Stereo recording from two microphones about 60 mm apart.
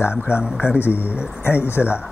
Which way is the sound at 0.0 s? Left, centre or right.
Left.